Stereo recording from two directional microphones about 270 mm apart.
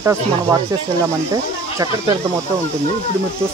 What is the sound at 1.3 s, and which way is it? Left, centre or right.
Speech, centre.